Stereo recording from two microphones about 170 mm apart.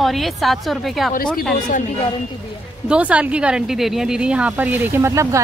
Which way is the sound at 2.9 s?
5° right (ahead or behind).